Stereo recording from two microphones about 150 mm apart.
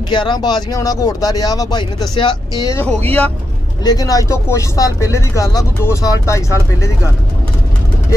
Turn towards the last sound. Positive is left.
turn(degrees=20)  # may be behind; listen again after turning